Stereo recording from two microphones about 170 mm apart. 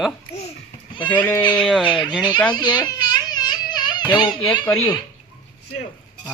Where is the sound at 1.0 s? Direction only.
10° left (ahead or behind).